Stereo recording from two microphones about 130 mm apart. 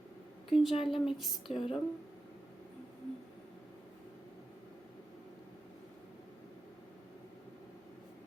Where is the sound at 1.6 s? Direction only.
50° left (ahead or behind).